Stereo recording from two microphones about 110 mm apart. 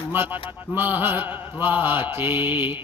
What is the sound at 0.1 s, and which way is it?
Speech, 20° right (ahead or behind).